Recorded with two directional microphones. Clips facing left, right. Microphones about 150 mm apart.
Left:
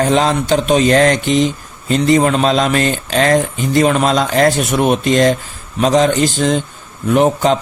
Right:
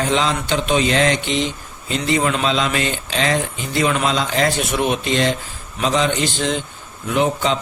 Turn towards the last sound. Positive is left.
turn(degrees=45)  # may be behind; listen again after turning